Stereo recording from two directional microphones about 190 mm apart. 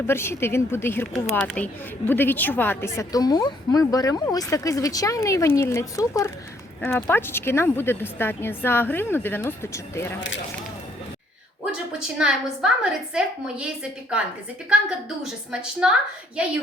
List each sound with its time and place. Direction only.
0.1 s a woman's voice: 15° left (ahead or behind)
10.2 s speech: 75° left (ahead or behind)
11.6 s a woman's voice: 5° right (ahead or behind)
14.7 s a woman's voice: 5° right (ahead or behind)